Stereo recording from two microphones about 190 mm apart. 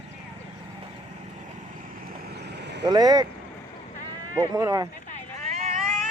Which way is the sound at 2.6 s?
65° right (ahead or behind).